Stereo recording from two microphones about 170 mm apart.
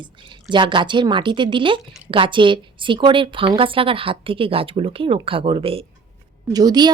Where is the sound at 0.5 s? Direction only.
30° right (ahead or behind).